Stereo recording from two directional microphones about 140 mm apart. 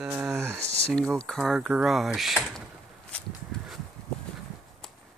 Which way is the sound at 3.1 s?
10° left (ahead or behind).